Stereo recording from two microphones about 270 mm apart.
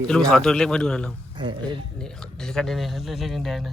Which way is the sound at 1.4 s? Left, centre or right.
Centre.